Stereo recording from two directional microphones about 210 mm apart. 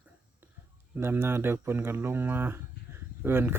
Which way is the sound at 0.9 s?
10° right (ahead or behind).